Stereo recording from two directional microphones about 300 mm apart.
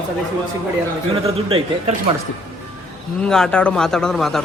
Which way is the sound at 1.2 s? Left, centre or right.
Centre.